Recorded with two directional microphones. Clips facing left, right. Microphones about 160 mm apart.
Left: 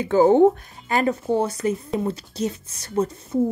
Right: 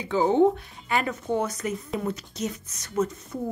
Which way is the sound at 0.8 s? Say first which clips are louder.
Left 5 dB; 35° left (ahead or behind).